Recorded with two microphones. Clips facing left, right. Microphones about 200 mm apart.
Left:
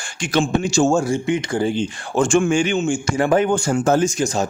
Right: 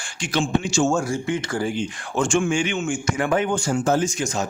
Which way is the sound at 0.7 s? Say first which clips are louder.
Left 4 dB; 35° left (ahead or behind).